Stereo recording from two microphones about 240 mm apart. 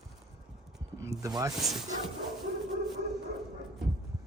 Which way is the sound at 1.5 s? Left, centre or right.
Centre.